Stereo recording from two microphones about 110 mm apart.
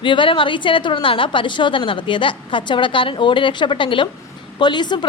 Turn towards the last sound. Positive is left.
turn(degrees=45)  # may be behind; listen again after turning